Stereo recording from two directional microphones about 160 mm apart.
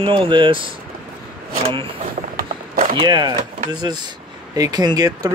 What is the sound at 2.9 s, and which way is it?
Speech, 30° right (ahead or behind).